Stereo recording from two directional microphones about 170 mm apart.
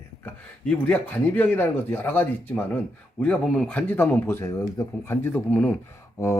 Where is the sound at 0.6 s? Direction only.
5° left (ahead or behind).